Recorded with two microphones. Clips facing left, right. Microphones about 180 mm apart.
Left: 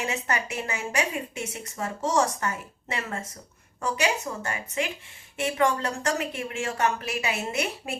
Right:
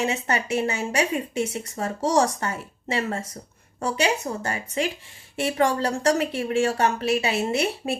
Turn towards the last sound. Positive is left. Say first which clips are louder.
# right 6 dB
turn(degrees=-30)  # may be behind; listen again after turning